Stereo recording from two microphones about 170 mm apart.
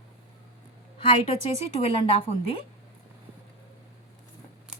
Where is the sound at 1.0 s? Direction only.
35° left (ahead or behind).